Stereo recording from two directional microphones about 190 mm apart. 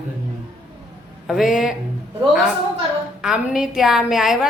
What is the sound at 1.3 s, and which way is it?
Speech, centre (ahead or behind).